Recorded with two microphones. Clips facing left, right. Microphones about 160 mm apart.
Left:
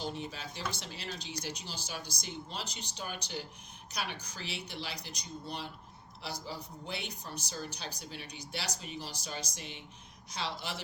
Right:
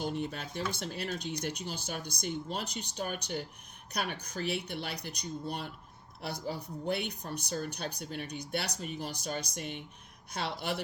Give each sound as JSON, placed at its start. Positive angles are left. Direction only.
{"t": 0.0, "sound": "speech", "side_deg": -55}